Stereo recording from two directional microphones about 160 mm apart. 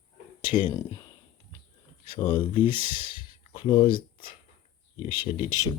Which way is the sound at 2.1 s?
30° left (ahead or behind).